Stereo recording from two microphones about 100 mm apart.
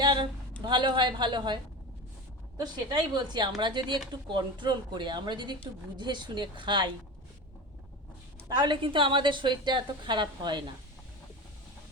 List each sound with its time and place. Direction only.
0.0 s a sound: 50° right (ahead or behind)
0.6 s a woman's voice: 50° right (ahead or behind)
2.6 s a woman's voice: 45° right (ahead or behind)
8.4 s a woman's voice: 50° right (ahead or behind)